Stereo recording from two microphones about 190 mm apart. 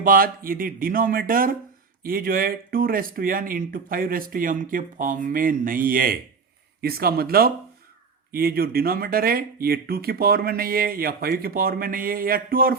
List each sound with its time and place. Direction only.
0.0 s speech: 50° right (ahead or behind)